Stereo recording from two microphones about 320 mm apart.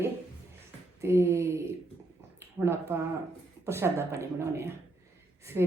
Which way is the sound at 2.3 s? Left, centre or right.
Centre.